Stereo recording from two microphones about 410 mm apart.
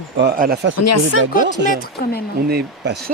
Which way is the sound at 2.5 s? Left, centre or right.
Right.